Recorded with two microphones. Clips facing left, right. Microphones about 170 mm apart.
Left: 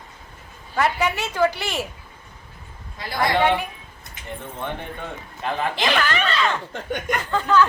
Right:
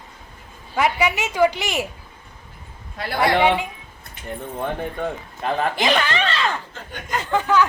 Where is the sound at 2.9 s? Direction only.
70° right (ahead or behind).